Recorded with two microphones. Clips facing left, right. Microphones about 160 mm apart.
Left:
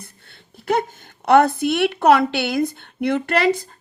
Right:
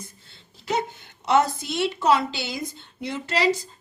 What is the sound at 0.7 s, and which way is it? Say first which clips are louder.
A woman's voice: left 5 dB; 55° left (ahead or behind).